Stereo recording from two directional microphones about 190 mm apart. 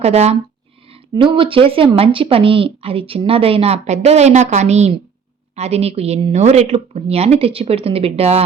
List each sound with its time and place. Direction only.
0.0 s a woman's voice: 35° right (ahead or behind)